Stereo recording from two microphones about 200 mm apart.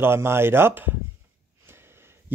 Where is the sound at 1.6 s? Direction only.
10° right (ahead or behind).